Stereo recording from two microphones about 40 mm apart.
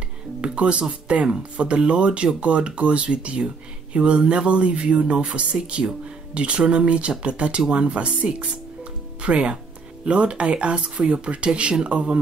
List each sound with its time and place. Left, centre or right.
0.4 s speech: right